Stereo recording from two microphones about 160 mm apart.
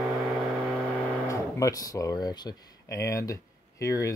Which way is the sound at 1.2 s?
20° left (ahead or behind).